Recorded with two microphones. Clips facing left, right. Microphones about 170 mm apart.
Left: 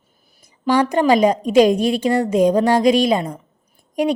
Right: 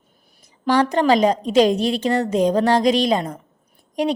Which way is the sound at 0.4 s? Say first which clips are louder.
Left 1 dB; 10° left (ahead or behind).